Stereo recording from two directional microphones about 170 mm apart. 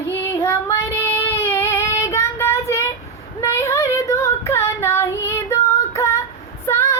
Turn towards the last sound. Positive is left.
turn(degrees=15)  # may be behind; listen again after turning